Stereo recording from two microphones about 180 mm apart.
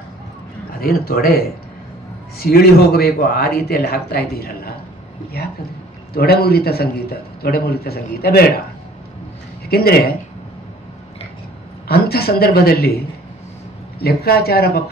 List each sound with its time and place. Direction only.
0.7 s a man's voice: 55° left (ahead or behind)
6.1 s a man's voice: 60° left (ahead or behind)
9.7 s a man's voice: 60° left (ahead or behind)
11.9 s a man's voice: 60° left (ahead or behind)